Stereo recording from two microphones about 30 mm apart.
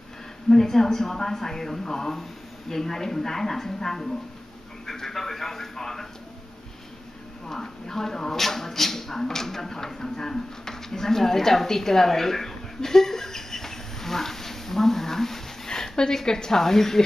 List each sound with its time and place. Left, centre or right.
0.5 s speech: centre
4.8 s a sound: centre
5.3 s speech: centre
7.4 s speech: centre